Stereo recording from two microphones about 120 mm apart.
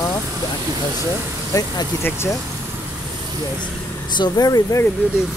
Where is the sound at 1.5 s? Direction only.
30° left (ahead or behind).